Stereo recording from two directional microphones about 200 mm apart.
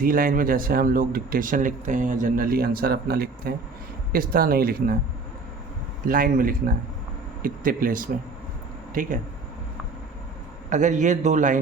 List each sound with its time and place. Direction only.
0.0 s speech: 45° right (ahead or behind)
6.1 s a man's voice: 45° right (ahead or behind)
10.7 s a man's voice: 35° right (ahead or behind)